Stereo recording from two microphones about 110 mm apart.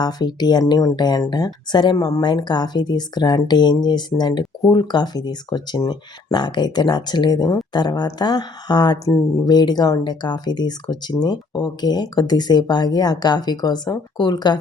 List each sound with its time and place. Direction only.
0.0 s speech: 40° left (ahead or behind)